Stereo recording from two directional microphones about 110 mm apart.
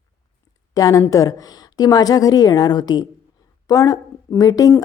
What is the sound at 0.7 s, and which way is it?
A woman's voice, 30° left (ahead or behind).